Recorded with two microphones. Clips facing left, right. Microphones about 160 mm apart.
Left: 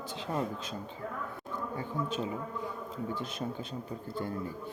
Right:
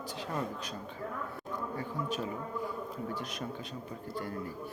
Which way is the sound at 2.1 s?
25° left (ahead or behind).